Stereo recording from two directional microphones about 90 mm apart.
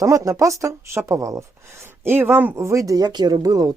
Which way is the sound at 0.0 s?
35° right (ahead or behind).